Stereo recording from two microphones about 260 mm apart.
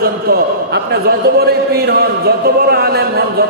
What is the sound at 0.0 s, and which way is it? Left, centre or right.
A man's voice, right.